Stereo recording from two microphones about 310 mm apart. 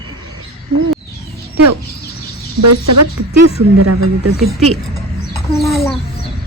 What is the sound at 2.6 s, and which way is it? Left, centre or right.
Speech, right.